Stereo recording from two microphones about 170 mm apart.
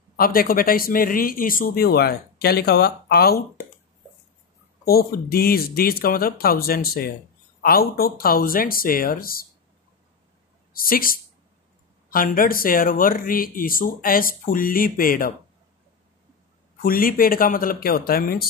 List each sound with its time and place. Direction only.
0.1 s a man's voice: 60° left (ahead or behind)
4.8 s a man's voice: 65° left (ahead or behind)
10.7 s a man's voice: 60° left (ahead or behind)
16.8 s a man's voice: 55° left (ahead or behind)